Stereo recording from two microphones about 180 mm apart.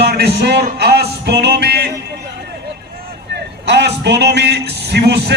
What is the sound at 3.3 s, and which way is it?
A man's voice, 70° right (ahead or behind).